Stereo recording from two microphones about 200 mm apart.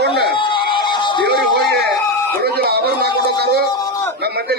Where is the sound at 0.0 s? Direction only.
55° right (ahead or behind).